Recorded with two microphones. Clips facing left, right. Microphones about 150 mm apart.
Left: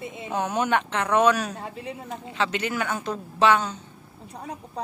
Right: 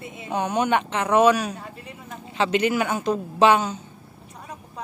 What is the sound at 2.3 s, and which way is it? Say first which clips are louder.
Speech: right 6 dB; 15° right (ahead or behind).